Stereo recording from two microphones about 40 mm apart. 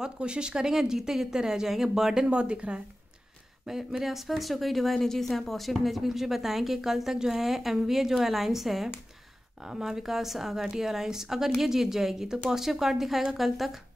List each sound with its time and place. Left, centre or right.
0.0 s speech: right
2.2 s speech: right
3.6 s speech: centre